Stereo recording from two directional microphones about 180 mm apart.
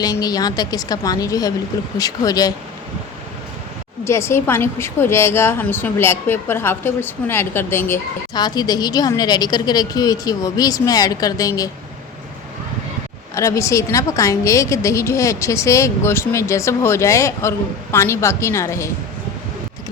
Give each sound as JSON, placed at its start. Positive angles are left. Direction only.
{"t": 0.0, "sound": "a woman's voice", "side_deg": 20}
{"t": 4.0, "sound": "a woman's voice", "side_deg": 15}
{"t": 13.3, "sound": "a woman's voice", "side_deg": 15}